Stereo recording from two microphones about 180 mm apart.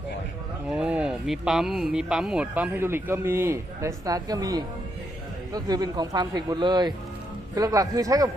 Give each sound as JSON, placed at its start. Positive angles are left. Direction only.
{"t": 0.7, "sound": "speech", "side_deg": -5}